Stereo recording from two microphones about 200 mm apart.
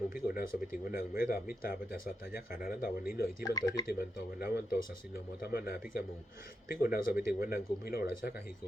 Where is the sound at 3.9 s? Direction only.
50° left (ahead or behind).